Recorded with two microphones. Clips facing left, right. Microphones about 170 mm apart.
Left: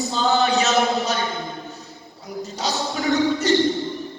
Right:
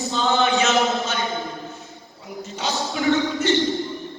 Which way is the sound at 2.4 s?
40° left (ahead or behind).